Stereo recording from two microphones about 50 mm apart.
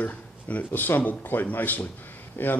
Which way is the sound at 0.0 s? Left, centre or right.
Left.